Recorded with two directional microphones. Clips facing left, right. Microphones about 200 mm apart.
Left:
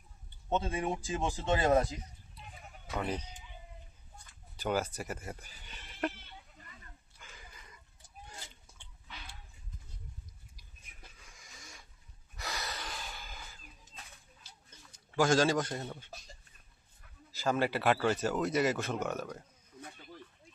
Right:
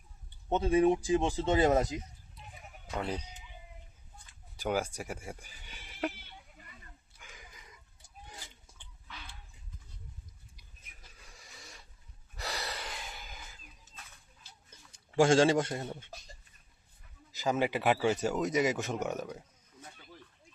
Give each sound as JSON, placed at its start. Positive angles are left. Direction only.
{"t": 0.5, "sound": "speech", "side_deg": -20}
{"t": 3.1, "sound": "speech", "side_deg": -10}
{"t": 4.5, "sound": "speech", "side_deg": -10}
{"t": 7.2, "sound": "a sound", "side_deg": -15}
{"t": 11.3, "sound": "printer", "side_deg": -35}
{"t": 12.4, "sound": "gasp", "side_deg": -35}
{"t": 14.9, "sound": "a man's voice", "side_deg": -30}
{"t": 17.3, "sound": "speech", "side_deg": -15}